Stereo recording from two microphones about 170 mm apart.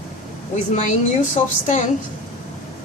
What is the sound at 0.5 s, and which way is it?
Speech, 45° left (ahead or behind).